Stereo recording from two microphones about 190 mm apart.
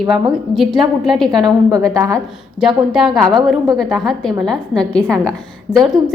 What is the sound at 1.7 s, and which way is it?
Speech, 15° right (ahead or behind).